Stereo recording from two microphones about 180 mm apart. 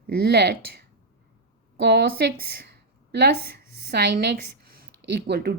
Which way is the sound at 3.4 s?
60° right (ahead or behind).